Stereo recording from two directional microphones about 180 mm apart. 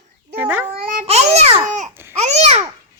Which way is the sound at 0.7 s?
50° right (ahead or behind).